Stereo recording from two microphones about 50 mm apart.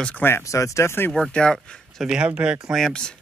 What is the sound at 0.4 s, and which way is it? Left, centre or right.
Speech, left.